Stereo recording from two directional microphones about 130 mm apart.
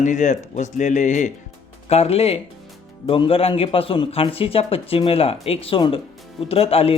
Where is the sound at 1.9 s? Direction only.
50° left (ahead or behind).